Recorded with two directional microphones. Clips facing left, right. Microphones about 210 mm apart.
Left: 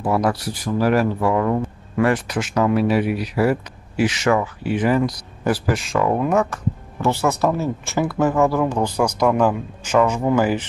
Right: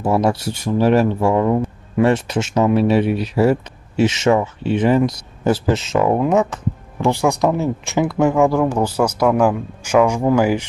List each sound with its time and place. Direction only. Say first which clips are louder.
0.0 s speech: right 3 dB; 25° right (ahead or behind)